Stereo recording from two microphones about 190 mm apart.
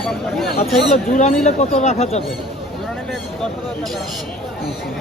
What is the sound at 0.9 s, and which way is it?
Speech, 40° left (ahead or behind).